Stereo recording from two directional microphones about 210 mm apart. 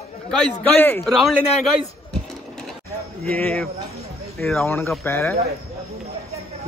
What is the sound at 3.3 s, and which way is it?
A man's voice, 10° left (ahead or behind).